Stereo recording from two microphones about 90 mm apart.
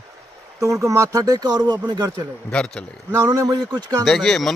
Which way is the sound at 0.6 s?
35° right (ahead or behind).